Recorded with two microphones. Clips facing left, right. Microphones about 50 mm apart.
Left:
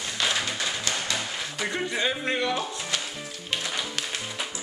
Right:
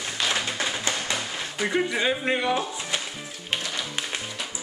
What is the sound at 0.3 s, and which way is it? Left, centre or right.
Tap, right.